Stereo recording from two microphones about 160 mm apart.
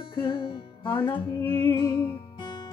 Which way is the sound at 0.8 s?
30° left (ahead or behind).